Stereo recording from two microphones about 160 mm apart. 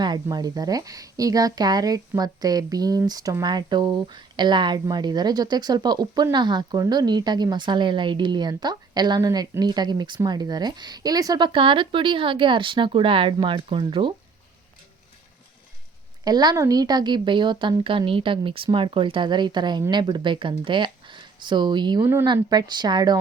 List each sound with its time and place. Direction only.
0.0 s speech: 25° right (ahead or behind)
16.2 s speech: 25° right (ahead or behind)
22.0 s speech: 15° right (ahead or behind)